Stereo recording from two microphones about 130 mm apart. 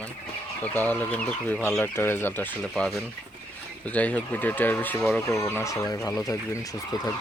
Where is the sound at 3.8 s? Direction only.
10° left (ahead or behind); by 6.3 s 25° left (ahead or behind).